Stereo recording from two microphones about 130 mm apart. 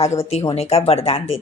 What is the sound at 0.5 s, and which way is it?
Speech, 50° left (ahead or behind).